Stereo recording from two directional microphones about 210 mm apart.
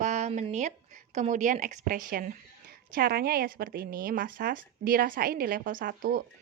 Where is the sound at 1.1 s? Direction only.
35° right (ahead or behind).